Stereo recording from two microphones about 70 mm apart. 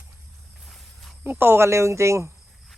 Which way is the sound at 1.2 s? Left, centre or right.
Right.